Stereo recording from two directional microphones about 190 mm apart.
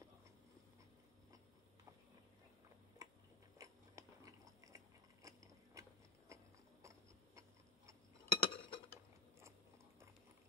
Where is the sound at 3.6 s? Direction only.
15° right (ahead or behind).